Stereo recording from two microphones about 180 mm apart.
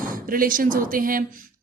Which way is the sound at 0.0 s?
50° right (ahead or behind).